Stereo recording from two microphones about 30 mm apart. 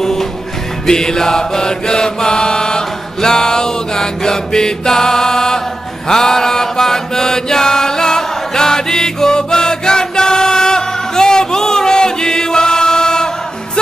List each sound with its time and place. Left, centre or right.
0.0 s music: centre
0.8 s mantra: centre